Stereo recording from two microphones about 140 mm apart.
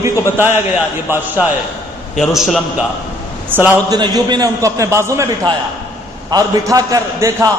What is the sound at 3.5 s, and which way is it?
Speech, 15° right (ahead or behind).